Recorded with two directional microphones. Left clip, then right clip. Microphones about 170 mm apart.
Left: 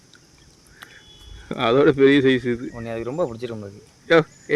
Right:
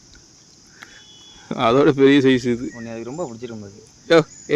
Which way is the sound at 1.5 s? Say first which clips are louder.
Right 1 dB; 20° right (ahead or behind).